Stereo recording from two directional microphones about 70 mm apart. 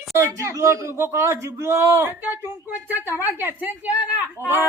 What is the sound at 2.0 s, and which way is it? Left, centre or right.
A woman's voice, right.